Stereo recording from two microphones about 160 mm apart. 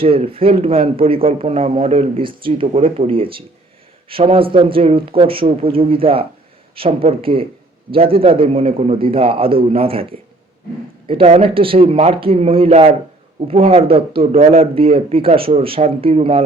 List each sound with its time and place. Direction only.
0.0 s a man's voice: 35° right (ahead or behind)